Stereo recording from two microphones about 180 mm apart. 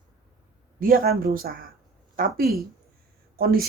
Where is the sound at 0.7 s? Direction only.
50° right (ahead or behind).